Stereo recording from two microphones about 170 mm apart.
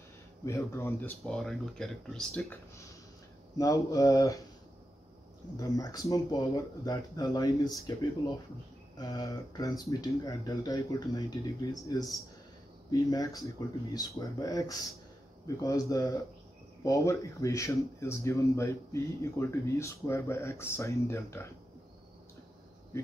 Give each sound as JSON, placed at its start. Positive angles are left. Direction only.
{"t": 0.5, "sound": "speech", "side_deg": 15}
{"t": 1.2, "sound": "speech", "side_deg": 0}
{"t": 3.5, "sound": "speech", "side_deg": 20}
{"t": 5.6, "sound": "speech", "side_deg": 20}
{"t": 8.9, "sound": "speech", "side_deg": 20}
{"t": 13.1, "sound": "speech", "side_deg": 20}